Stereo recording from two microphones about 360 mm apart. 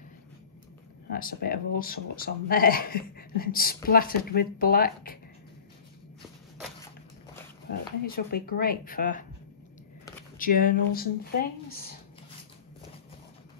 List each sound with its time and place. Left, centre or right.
1.1 s speech: left
8.0 s speech: left
10.3 s speech: left